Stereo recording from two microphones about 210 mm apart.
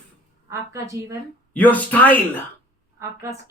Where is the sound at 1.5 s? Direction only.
5° left (ahead or behind).